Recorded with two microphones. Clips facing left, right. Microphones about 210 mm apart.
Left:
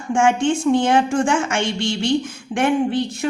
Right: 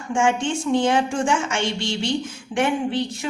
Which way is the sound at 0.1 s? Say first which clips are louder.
Left 4 dB; 55° left (ahead or behind).